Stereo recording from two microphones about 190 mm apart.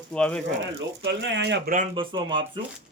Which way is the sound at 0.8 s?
75° right (ahead or behind).